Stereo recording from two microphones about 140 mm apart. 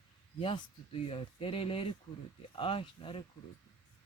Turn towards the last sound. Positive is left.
turn(degrees=40)  # may be behind; listen again after turning